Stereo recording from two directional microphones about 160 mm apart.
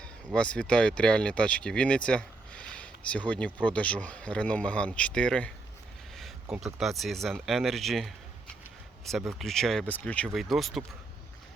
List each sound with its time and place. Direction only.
0.0 s speech: 5° left (ahead or behind)